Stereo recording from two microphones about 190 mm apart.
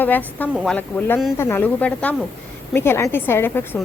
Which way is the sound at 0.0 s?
10° left (ahead or behind).